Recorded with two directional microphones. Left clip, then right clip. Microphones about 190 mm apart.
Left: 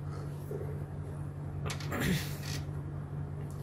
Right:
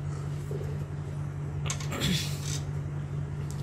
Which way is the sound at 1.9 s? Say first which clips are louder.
Right 3 dB; 35° left (ahead or behind).